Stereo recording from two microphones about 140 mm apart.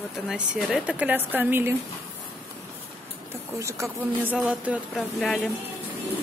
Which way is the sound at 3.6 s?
20° right (ahead or behind).